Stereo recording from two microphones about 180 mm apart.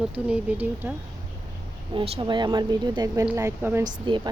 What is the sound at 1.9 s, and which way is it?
Speech, 25° right (ahead or behind).